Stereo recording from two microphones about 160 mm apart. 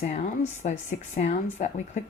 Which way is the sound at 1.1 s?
45° left (ahead or behind).